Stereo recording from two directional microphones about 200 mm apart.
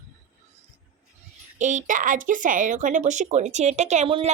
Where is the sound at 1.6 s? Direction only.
40° right (ahead or behind).